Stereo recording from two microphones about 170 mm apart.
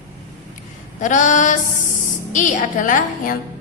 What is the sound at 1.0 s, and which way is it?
A woman's voice, 50° left (ahead or behind).